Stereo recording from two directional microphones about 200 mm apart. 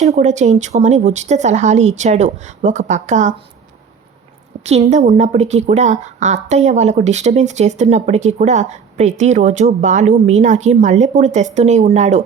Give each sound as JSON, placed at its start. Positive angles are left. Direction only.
{"t": 0.0, "sound": "a woman's voice", "side_deg": -35}
{"t": 4.6, "sound": "a woman's voice", "side_deg": -35}